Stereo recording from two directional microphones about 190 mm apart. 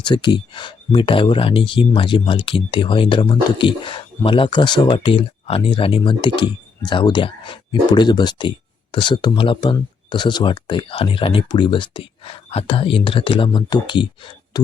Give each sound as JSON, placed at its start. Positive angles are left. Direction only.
{"t": 0.0, "sound": "speech", "side_deg": 25}